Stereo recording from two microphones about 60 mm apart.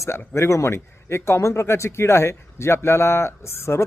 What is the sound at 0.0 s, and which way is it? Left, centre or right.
Speech, left.